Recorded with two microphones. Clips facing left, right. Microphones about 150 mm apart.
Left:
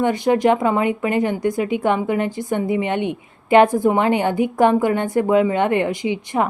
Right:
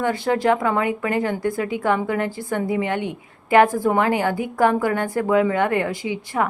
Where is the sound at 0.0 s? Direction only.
20° left (ahead or behind).